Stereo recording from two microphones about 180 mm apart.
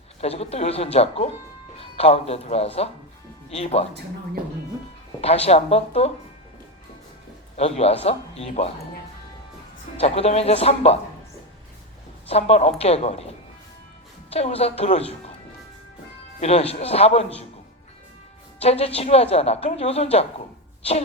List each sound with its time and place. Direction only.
0.2 s speech: 35° left (ahead or behind)
5.2 s speech: 35° left (ahead or behind)
7.5 s speech: 35° left (ahead or behind)
10.0 s speech: 35° left (ahead or behind)
12.3 s speech: 35° left (ahead or behind)
16.4 s speech: 35° left (ahead or behind)
18.6 s speech: 35° left (ahead or behind)